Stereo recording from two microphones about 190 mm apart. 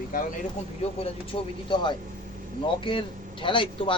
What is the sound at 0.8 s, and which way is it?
Speech, 35° left (ahead or behind).